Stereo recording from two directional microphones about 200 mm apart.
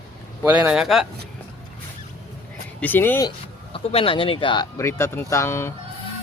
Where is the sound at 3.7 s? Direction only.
30° left (ahead or behind); by 5.7 s 10° left (ahead or behind).